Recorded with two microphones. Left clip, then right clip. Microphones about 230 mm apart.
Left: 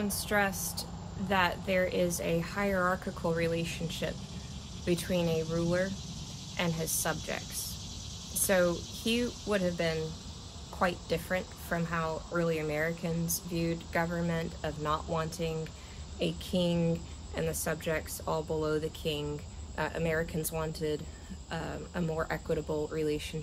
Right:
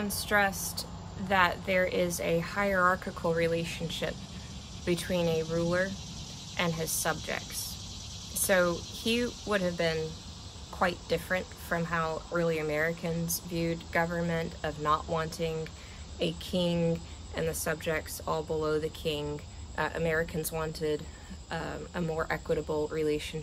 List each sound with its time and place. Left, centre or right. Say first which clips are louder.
0.0 s speech: right 3 dB; centre